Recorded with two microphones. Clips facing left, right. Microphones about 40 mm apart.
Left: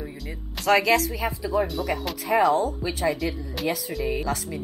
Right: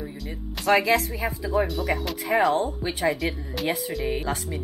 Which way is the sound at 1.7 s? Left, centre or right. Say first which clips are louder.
Right 1 dB; centre.